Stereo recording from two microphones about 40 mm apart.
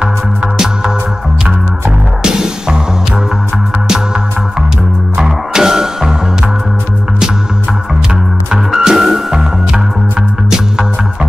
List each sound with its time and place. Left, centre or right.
2.2 s music: centre
5.2 s music: centre
8.5 s music: centre